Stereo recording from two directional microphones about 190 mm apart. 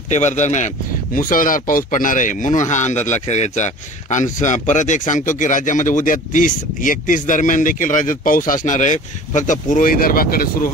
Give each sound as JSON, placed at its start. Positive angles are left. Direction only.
{"t": 0.1, "sound": "speech", "side_deg": 40}